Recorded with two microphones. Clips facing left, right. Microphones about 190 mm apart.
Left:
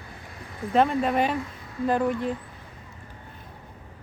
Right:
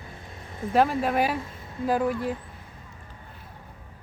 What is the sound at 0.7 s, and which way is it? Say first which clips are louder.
Speech: left 1 dB; 5° right (ahead or behind).